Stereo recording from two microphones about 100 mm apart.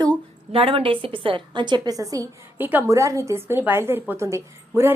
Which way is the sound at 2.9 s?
30° right (ahead or behind).